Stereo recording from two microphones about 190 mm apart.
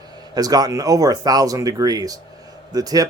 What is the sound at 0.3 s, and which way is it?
Speech, 20° right (ahead or behind).